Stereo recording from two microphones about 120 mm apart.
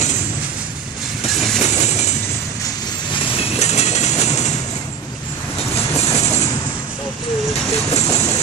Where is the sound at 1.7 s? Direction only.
70° left (ahead or behind).